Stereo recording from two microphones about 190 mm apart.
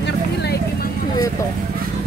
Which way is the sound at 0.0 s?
60° left (ahead or behind).